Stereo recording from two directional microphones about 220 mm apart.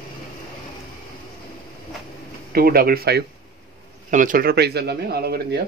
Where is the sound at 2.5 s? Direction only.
40° right (ahead or behind).